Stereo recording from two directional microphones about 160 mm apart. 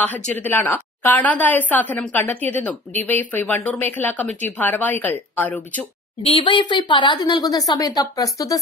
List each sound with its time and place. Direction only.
0.0 s a woman's voice: 10° left (ahead or behind)
6.2 s a woman's voice: 30° left (ahead or behind)